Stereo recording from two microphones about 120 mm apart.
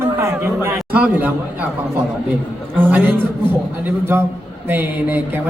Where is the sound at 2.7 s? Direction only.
15° right (ahead or behind).